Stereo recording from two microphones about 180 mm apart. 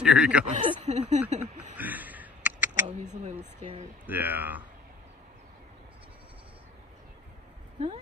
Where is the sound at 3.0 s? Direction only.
40° right (ahead or behind).